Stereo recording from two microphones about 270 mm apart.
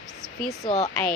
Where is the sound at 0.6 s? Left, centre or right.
Left.